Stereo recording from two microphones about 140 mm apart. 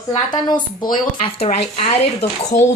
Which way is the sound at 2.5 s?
20° left (ahead or behind).